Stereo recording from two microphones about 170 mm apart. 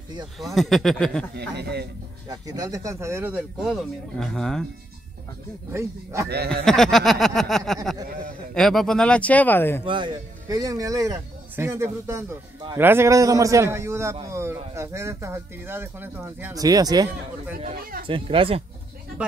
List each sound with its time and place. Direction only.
0.4 s speech: centre (ahead or behind)
1.3 s a man's voice: 80° right
2.2 s speech: 20° right (ahead or behind); by 4.6 s 5° left (ahead or behind)
5.7 s speech: 15° right (ahead or behind)
6.2 s a man's voice: 70° right (ahead or behind)
6.6 s speech: centre (ahead or behind)
9.8 s speech: 30° right (ahead or behind)